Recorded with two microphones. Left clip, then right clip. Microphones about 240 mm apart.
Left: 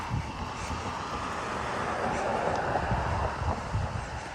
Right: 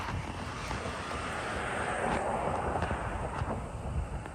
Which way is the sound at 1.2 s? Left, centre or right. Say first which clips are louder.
Left 1 dB; left.